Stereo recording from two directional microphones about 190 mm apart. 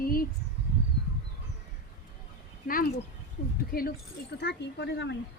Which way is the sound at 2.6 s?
50° left (ahead or behind).